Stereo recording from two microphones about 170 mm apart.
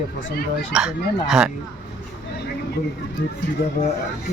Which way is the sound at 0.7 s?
5° right (ahead or behind).